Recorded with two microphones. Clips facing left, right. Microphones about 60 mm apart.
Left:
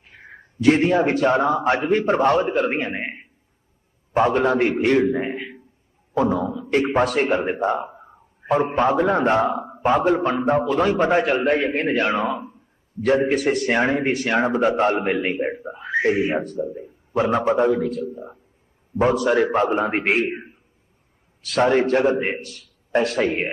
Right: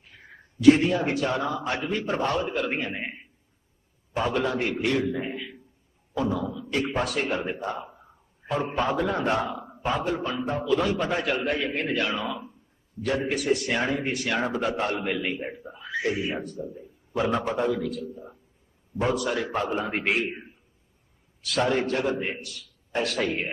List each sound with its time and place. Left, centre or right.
0.0 s a man's voice: left